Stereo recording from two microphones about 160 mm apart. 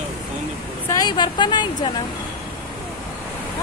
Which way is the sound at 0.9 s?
25° left (ahead or behind).